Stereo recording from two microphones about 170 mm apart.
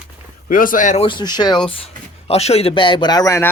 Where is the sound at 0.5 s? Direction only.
55° left (ahead or behind).